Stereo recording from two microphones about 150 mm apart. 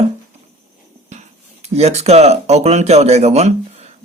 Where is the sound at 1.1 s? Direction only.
50° right (ahead or behind).